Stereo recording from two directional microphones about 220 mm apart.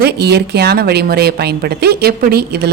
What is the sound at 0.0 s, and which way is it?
A woman's voice, 50° right (ahead or behind).